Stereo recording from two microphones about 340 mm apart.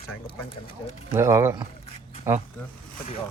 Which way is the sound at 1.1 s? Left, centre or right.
Centre.